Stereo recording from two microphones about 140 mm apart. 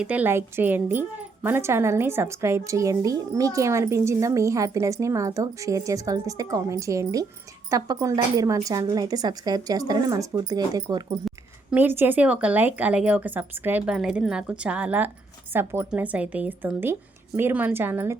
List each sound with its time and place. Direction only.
0.0 s speech: 10° right (ahead or behind)
11.3 s speech: 10° right (ahead or behind)